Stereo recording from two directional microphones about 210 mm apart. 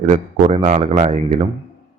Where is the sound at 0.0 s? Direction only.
30° right (ahead or behind).